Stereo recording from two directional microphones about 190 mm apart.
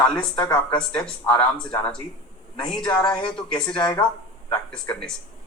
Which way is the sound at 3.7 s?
25° left (ahead or behind).